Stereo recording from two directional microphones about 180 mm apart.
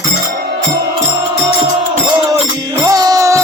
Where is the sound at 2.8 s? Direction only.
20° right (ahead or behind).